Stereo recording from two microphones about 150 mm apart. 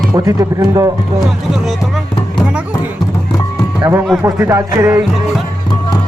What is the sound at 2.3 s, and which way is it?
Music, 5° right (ahead or behind).